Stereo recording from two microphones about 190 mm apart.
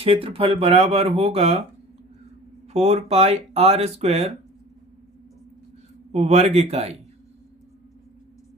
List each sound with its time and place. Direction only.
0.0 s speech: 30° right (ahead or behind)
2.7 s speech: 35° right (ahead or behind)
6.1 s speech: 35° right (ahead or behind)